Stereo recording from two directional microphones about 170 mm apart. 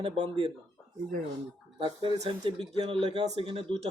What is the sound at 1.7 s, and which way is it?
Speech, 30° right (ahead or behind).